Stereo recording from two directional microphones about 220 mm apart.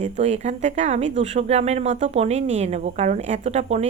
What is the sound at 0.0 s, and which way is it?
Speech, 30° right (ahead or behind).